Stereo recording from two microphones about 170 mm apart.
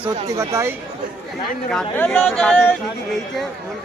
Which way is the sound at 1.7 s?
5° left (ahead or behind).